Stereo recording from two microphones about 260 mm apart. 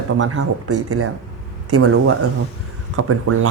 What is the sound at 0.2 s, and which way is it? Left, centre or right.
Speech, right.